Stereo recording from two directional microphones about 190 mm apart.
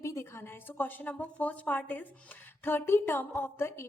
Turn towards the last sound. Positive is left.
turn(degrees=15)  # may be behind; listen again after turning